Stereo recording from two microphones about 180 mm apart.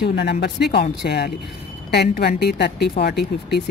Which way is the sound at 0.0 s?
65° left (ahead or behind).